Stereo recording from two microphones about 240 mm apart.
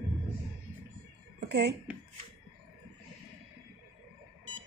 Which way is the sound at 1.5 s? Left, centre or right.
Right.